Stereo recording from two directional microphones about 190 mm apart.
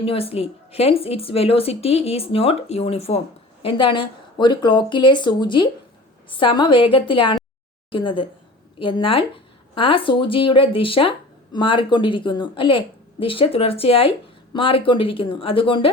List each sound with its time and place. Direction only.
0.0 s a woman's voice: 30° left (ahead or behind)